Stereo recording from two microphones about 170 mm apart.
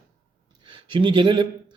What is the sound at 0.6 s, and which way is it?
Speech, 30° right (ahead or behind).